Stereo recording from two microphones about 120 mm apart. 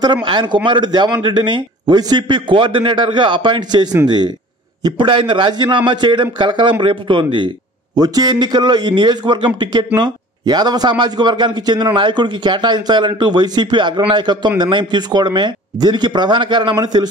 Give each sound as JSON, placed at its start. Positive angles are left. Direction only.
{"t": 0.0, "sound": "a man's voice", "side_deg": -40}